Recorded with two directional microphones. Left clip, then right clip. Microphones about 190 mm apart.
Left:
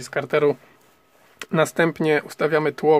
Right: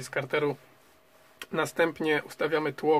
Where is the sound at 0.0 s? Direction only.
40° left (ahead or behind).